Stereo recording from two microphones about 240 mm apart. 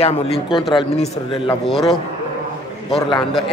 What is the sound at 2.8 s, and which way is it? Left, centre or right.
Speech, left.